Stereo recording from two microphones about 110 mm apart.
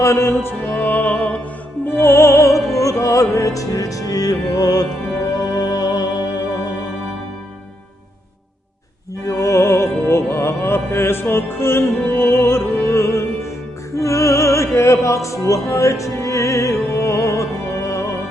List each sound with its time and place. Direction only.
0.0 s music: 25° left (ahead or behind)
1.9 s music: 20° left (ahead or behind); by 6.2 s 40° left (ahead or behind)
9.2 s music: 25° left (ahead or behind)
13.9 s opera: 25° left (ahead or behind)
16.9 s music: 25° left (ahead or behind)